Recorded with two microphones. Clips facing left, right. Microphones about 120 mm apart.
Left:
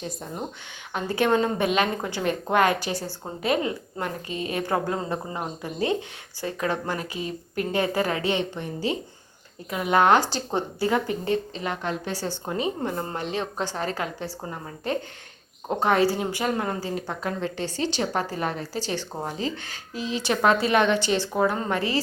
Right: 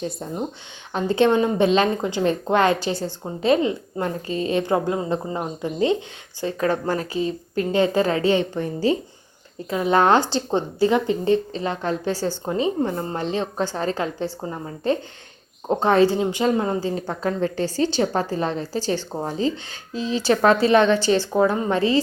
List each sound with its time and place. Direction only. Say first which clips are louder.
0.9 s a woman's voice: right 4 dB; 25° right (ahead or behind)
6.4 s a woman's voice: right 5 dB; 35° right (ahead or behind)
15.8 s a woman's voice: right 4 dB; 30° right (ahead or behind)